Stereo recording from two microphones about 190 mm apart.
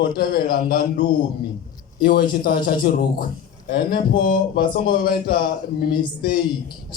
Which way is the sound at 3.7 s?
55° left (ahead or behind).